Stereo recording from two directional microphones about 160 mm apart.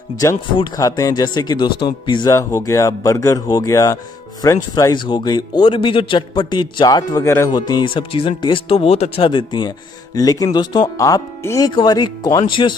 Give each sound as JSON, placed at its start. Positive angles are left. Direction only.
{"t": 0.5, "sound": "a man's voice", "side_deg": 25}